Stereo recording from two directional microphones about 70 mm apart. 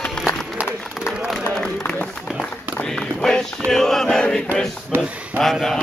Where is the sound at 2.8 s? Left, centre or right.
Centre.